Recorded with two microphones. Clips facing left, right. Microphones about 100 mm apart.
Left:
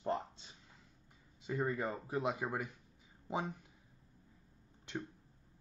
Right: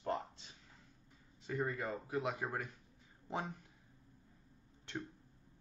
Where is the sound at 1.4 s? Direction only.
10° left (ahead or behind).